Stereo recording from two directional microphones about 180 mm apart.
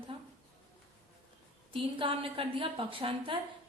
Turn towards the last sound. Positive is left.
turn(degrees=-30)  # may be behind; listen again after turning